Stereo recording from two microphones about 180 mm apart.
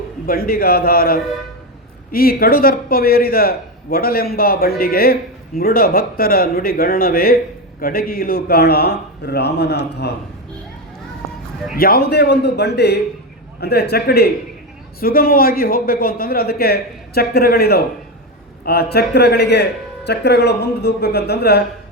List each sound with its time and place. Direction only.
0.3 s a man's voice: 55° left (ahead or behind)
11.8 s a man's voice: 55° left (ahead or behind)